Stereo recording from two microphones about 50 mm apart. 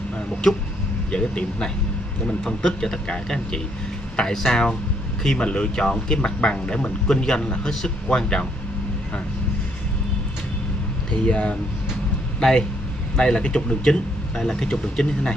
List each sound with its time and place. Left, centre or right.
1.1 s speech: centre
4.2 s speech: centre
11.1 s speech: left
14.3 s speech: centre